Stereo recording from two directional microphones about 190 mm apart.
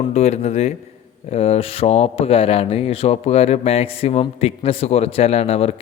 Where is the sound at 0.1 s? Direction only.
35° left (ahead or behind).